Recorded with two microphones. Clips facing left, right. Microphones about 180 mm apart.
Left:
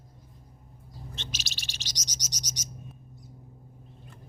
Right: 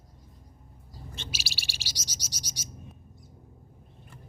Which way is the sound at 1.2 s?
10° right (ahead or behind).